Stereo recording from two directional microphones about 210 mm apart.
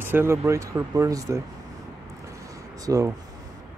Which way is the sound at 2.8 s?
15° right (ahead or behind).